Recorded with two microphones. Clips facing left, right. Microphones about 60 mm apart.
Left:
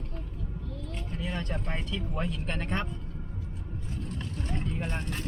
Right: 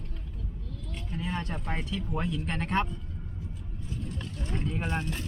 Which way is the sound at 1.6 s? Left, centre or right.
Centre.